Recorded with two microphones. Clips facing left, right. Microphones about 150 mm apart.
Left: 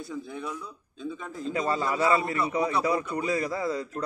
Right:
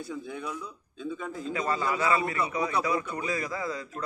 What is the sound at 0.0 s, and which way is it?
A man's voice, centre (ahead or behind).